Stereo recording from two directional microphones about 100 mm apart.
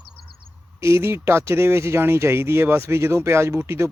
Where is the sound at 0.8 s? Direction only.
25° right (ahead or behind).